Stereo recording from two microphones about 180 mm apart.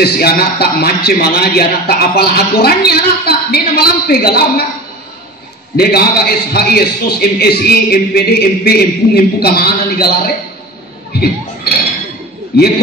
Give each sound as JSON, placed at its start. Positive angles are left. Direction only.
{"t": 0.0, "sound": "a man's voice", "side_deg": 60}
{"t": 5.8, "sound": "a man's voice", "side_deg": 60}
{"t": 12.5, "sound": "a man's voice", "side_deg": 60}